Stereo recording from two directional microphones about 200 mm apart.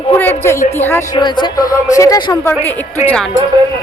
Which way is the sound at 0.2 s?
10° left (ahead or behind).